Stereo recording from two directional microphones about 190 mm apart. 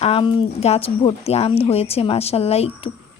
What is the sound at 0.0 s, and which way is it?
Speech, 30° left (ahead or behind).